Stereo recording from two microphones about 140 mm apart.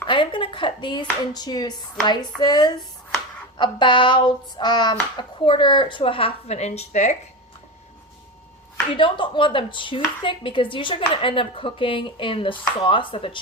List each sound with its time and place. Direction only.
0.1 s speech: 35° left (ahead or behind); by 7.2 s 55° left (ahead or behind)
9.0 s speech: 35° left (ahead or behind)